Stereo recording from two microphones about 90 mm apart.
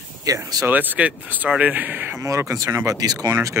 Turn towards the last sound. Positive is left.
turn(degrees=-35)  # may be behind; listen again after turning